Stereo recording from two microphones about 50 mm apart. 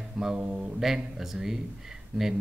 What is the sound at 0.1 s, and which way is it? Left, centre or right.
Speech, centre.